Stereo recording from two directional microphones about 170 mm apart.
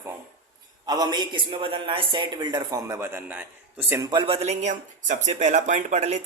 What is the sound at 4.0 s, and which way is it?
Speech, 25° right (ahead or behind).